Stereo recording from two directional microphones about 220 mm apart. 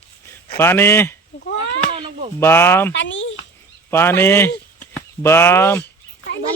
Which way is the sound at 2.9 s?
55° left (ahead or behind).